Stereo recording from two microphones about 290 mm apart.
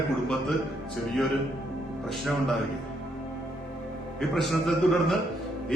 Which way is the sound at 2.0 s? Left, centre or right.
Centre.